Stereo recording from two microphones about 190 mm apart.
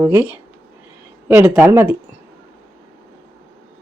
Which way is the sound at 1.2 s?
10° right (ahead or behind).